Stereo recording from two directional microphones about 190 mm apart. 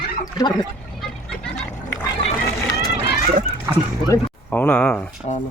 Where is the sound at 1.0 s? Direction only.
5° left (ahead or behind).